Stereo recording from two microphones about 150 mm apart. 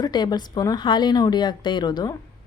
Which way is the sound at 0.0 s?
25° left (ahead or behind).